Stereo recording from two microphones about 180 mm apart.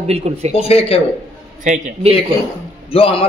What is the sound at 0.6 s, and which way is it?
Speech, 35° left (ahead or behind).